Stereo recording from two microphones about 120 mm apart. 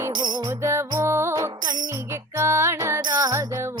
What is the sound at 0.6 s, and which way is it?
Music, 25° right (ahead or behind).